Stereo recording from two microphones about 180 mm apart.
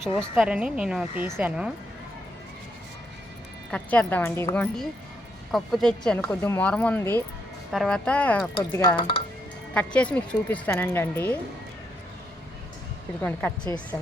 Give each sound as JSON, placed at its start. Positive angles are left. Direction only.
{"t": 0.2, "sound": "speech", "side_deg": -5}
{"t": 3.7, "sound": "speech", "side_deg": 10}
{"t": 7.7, "sound": "speech", "side_deg": 0}
{"t": 9.0, "sound": "speech", "side_deg": 30}
{"t": 9.7, "sound": "speech", "side_deg": 5}